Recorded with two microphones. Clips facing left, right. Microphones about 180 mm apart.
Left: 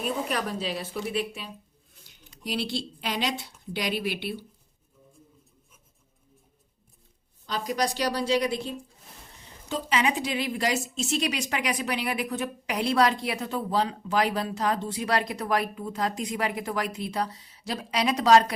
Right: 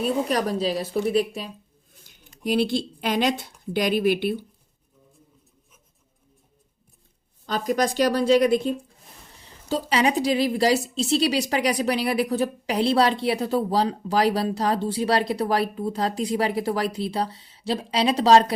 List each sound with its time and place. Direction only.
0.0 s a woman's voice: 40° right (ahead or behind)
2.0 s speech: 50° right (ahead or behind)
7.4 s a woman's voice: 50° right (ahead or behind)
9.6 s a woman's voice: 35° right (ahead or behind)